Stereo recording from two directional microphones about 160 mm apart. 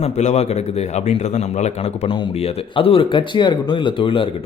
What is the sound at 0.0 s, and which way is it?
A man's voice, 45° left (ahead or behind).